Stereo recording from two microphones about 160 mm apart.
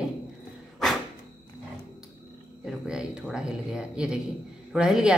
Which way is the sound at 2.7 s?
5° right (ahead or behind).